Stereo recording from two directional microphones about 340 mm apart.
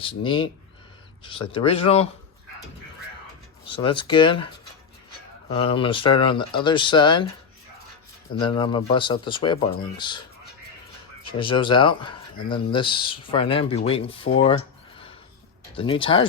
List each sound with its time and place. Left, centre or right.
0.0 s speech: centre
3.7 s speech: centre
8.4 s speech: centre
11.3 s speech: centre
14.4 s a sound: centre
15.7 s speech: centre